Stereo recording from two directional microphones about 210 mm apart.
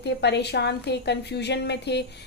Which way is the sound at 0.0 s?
55° left (ahead or behind).